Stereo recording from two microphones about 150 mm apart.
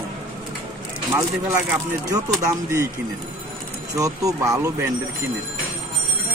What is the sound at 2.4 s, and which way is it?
Speech, 20° right (ahead or behind).